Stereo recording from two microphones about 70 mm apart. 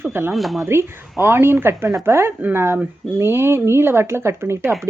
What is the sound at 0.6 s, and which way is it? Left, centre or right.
Speech, right.